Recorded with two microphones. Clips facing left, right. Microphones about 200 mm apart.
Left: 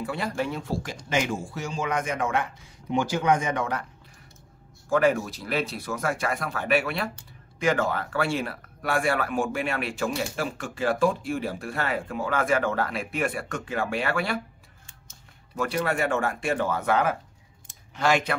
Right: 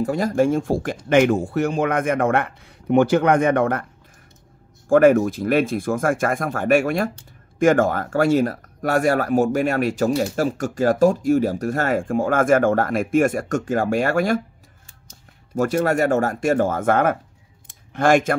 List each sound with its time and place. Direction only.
0.0 s speech: 45° right (ahead or behind)
1.0 s speech: 60° right (ahead or behind)
4.8 s speech: 50° right (ahead or behind)
15.5 s speech: 45° right (ahead or behind)
17.6 s clicking: 50° right (ahead or behind)